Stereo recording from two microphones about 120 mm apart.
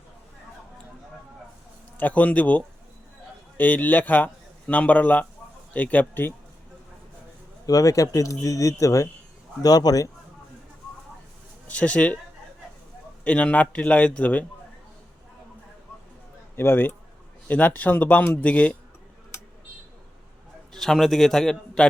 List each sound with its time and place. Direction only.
2.0 s speech: 15° left (ahead or behind)
7.7 s speech: 30° left (ahead or behind)
11.7 s speech: 10° left (ahead or behind)
13.2 s speech: 10° left (ahead or behind)
16.6 s speech: 20° left (ahead or behind)
20.7 s a man's voice: 5° left (ahead or behind)